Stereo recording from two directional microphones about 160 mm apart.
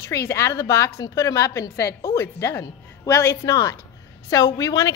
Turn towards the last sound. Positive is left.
turn(degrees=20)  # may be behind; listen again after turning